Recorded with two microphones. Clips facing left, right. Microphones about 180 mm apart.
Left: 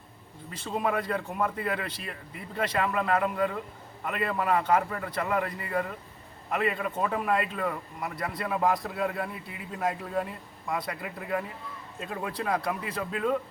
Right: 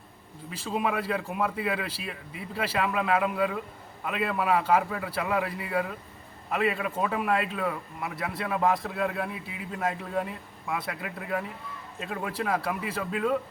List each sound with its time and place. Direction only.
0.5 s a man's voice: 10° right (ahead or behind)